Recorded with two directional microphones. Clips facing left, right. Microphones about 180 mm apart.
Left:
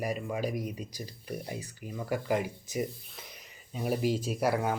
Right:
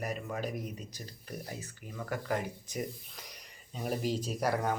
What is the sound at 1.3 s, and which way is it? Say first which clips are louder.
Speech: left 4 dB; 25° left (ahead or behind).